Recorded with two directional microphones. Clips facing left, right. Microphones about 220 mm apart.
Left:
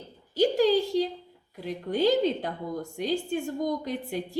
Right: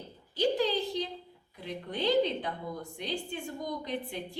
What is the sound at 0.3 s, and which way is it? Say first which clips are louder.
A woman's voice: left 6 dB; 45° left (ahead or behind).